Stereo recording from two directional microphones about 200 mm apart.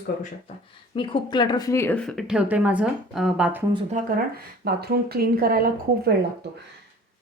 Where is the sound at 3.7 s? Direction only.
35° right (ahead or behind).